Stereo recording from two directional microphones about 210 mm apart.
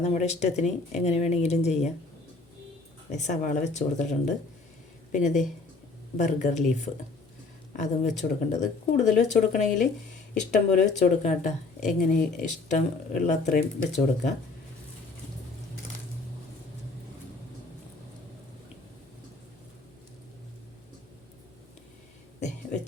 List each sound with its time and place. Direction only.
0.0 s speech: 30° left (ahead or behind)
3.1 s speech: 35° left (ahead or behind)
22.4 s a sound: 35° left (ahead or behind)